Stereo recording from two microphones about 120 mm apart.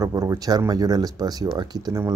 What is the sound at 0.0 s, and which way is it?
Speech, 30° right (ahead or behind).